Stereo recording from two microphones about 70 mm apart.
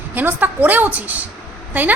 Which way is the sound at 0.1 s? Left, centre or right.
Right.